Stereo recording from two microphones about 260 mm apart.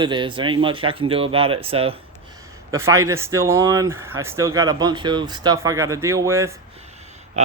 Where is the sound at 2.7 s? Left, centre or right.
Centre.